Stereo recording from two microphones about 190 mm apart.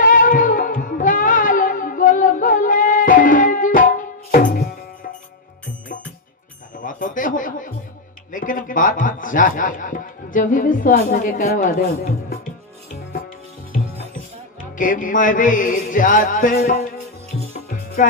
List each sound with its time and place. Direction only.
0.0 s music: 45° left (ahead or behind)
6.7 s a sound: 45° left (ahead or behind)
8.3 s a man's voice: 45° left (ahead or behind)
14.8 s music: 45° left (ahead or behind)